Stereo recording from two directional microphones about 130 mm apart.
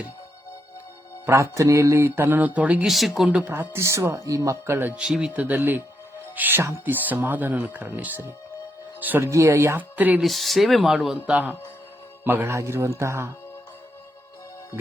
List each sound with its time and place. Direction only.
1.2 s speech: 20° right (ahead or behind); by 3.2 s centre (ahead or behind)
3.2 s speech: 10° right (ahead or behind)
10.2 s speech: centre (ahead or behind)
12.2 s speech: 20° right (ahead or behind)